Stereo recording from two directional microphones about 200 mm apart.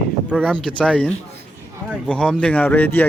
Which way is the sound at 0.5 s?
5° left (ahead or behind).